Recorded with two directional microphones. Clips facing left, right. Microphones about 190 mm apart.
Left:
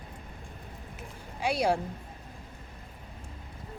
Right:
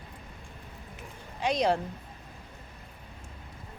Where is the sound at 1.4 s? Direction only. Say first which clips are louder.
Right 1 dB; 10° left (ahead or behind).